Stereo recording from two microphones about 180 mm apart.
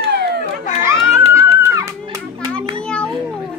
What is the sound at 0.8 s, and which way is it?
Children playing, 15° right (ahead or behind).